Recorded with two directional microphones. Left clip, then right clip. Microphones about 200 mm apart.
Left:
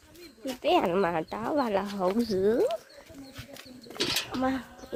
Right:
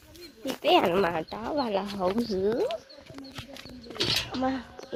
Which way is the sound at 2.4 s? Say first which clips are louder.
Left 3 dB; 30° left (ahead or behind).